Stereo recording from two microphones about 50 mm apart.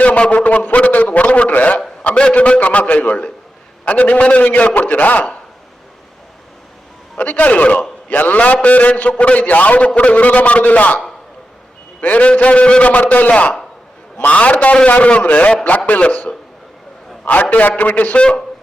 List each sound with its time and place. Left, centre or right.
0.0 s a sound: left
2.0 s a man's voice: left
7.2 s a man's voice: left
17.5 s a man's voice: left
18.2 s a man's voice: centre